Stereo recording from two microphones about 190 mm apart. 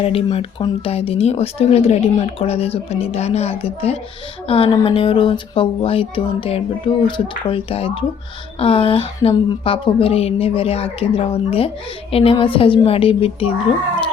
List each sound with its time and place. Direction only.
0.0 s speech: 30° left (ahead or behind)